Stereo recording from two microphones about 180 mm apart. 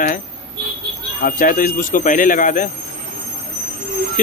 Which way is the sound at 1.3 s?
50° left (ahead or behind).